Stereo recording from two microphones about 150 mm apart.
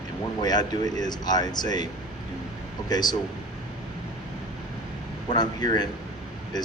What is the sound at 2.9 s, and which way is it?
Speech, 25° left (ahead or behind).